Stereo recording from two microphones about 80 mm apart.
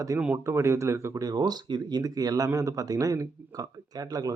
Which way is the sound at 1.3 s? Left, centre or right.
Right.